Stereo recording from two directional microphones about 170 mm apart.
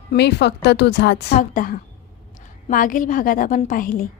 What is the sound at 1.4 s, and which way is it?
A woman's voice, 55° left (ahead or behind).